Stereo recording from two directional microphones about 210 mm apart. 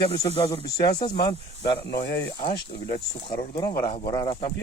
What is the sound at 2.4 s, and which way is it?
Speech, 25° left (ahead or behind).